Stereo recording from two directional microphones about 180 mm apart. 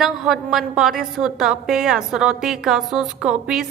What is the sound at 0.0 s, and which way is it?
A woman's voice, centre (ahead or behind).